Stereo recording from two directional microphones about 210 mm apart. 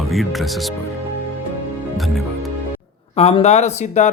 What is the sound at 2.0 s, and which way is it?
Speech, centre (ahead or behind).